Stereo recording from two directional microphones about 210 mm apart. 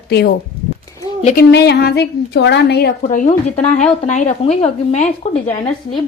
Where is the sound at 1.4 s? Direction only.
50° left (ahead or behind); by 5.3 s 35° left (ahead or behind).